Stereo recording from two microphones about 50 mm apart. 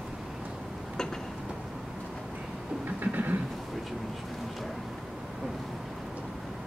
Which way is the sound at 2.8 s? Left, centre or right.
Right.